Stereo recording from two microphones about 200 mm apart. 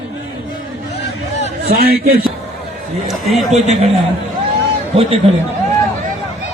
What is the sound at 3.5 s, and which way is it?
Speech, 35° right (ahead or behind).